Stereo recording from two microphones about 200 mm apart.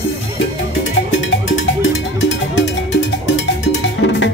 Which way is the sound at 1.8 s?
65° left (ahead or behind).